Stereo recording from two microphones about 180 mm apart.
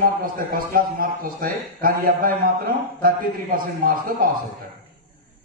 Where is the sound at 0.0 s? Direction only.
50° right (ahead or behind).